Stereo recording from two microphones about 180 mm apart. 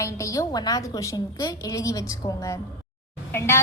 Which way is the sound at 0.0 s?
15° left (ahead or behind).